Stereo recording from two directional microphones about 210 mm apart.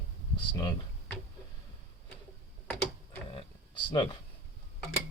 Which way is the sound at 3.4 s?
25° left (ahead or behind).